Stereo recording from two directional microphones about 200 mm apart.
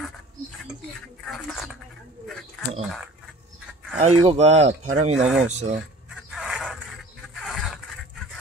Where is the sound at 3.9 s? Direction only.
35° right (ahead or behind).